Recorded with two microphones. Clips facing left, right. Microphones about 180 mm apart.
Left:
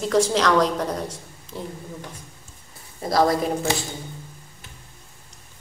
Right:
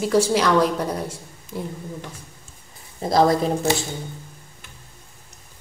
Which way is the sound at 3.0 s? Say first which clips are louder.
Right 2 dB; 25° right (ahead or behind).